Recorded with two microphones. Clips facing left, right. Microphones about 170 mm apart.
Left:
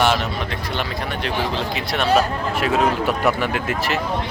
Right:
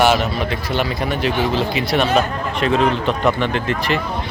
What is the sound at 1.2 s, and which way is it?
Speech, 5° right (ahead or behind).